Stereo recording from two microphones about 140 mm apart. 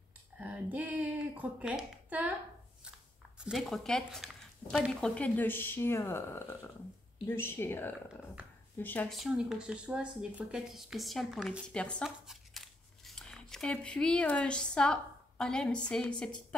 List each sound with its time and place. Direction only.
0.4 s speech: 10° right (ahead or behind)
3.4 s a woman's voice: centre (ahead or behind)
9.1 s speech: centre (ahead or behind)
11.7 s speech: 5° left (ahead or behind)